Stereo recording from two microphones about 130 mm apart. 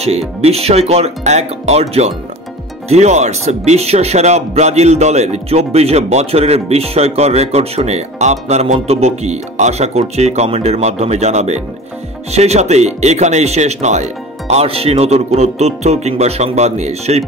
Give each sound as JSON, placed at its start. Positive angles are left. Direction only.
{"t": 0.4, "sound": "speech", "side_deg": -55}